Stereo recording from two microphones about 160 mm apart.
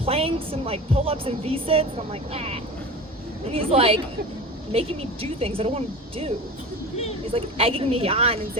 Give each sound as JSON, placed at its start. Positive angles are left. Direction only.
{"t": 0.0, "sound": "speech", "side_deg": -35}
{"t": 7.3, "sound": "speech", "side_deg": -35}